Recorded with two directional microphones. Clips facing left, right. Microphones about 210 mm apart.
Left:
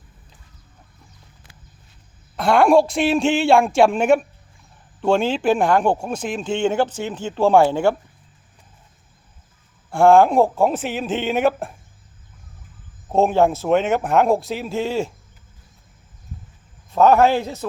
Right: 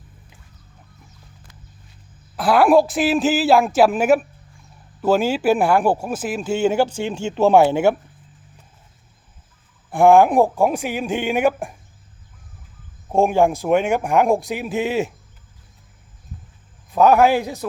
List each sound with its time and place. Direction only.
2.3 s speech: 5° right (ahead or behind)
7.0 s speech: 25° right (ahead or behind)
9.9 s speech: 15° right (ahead or behind)
13.1 s speech: 10° right (ahead or behind)
16.9 s speech: 10° right (ahead or behind)